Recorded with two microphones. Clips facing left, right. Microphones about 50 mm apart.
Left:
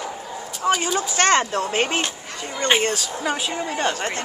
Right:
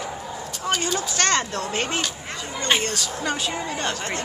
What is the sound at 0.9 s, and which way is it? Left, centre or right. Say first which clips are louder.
Speech: left 4 dB; left.